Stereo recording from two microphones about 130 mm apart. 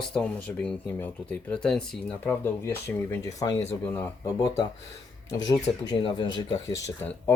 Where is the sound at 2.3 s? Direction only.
15° left (ahead or behind).